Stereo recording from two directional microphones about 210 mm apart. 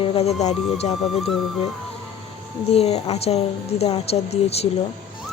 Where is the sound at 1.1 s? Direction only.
Centre (ahead or behind).